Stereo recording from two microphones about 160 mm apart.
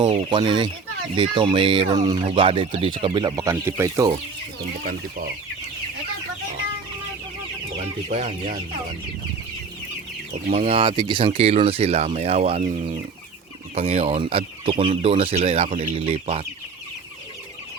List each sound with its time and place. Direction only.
0.0 s speech: 30° right (ahead or behind)
4.6 s speech: 70° right (ahead or behind)
7.8 s chicken: 45° right (ahead or behind)
10.5 s speech: 40° right (ahead or behind)